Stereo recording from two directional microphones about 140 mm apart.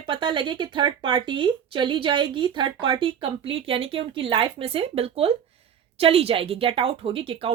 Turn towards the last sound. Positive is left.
turn(degrees=-40)  # may be behind; listen again after turning